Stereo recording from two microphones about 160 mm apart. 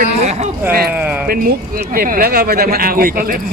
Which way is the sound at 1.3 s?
65° right (ahead or behind).